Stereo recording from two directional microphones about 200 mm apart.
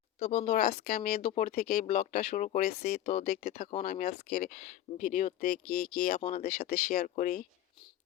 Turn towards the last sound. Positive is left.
turn(degrees=40)  # may be behind; listen again after turning